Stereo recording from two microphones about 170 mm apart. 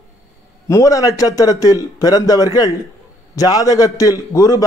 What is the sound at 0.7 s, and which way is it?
Speech, 20° left (ahead or behind).